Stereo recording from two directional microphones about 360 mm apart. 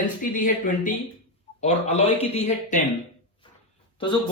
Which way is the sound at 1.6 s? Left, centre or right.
Centre.